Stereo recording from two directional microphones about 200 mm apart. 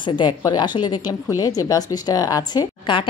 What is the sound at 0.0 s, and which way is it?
Speech, 25° left (ahead or behind).